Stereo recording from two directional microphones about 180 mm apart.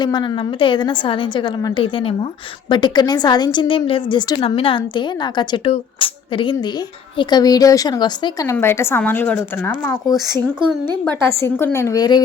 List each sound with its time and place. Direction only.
0.0 s a woman's voice: 25° left (ahead or behind)